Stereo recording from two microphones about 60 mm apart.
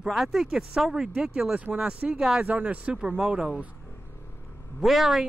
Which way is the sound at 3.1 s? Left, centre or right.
Centre.